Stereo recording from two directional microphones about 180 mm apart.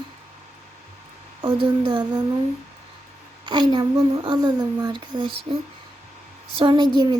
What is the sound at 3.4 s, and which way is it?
Speech, 25° right (ahead or behind).